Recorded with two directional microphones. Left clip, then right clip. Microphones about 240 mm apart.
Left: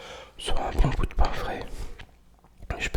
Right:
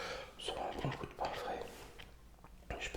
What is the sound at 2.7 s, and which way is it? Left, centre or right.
Whispering, left.